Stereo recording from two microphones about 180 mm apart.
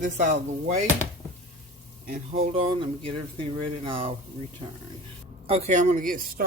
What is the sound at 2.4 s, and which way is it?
Speech, 30° right (ahead or behind).